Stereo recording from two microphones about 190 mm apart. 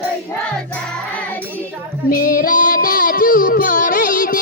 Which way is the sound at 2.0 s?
50° left (ahead or behind).